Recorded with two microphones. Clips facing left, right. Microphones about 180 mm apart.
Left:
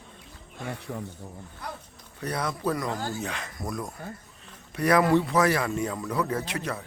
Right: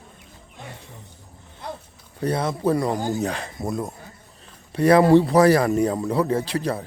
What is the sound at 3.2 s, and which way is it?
A man's voice, 35° right (ahead or behind).